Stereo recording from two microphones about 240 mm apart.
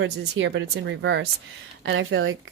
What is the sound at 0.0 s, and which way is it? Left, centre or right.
Speech, right.